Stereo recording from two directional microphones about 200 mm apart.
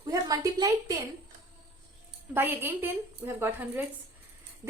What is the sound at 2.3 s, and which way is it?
A woman's voice, 10° right (ahead or behind).